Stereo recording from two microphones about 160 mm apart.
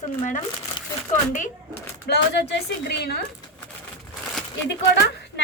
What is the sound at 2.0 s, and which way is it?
A woman's voice, 90° left.